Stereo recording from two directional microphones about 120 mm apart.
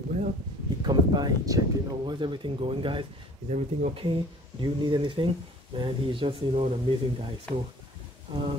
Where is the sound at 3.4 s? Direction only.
90° right.